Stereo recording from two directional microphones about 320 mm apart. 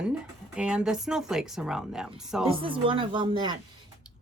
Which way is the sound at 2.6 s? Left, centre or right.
Centre.